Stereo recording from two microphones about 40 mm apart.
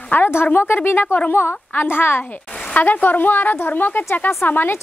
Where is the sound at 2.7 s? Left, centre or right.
Left.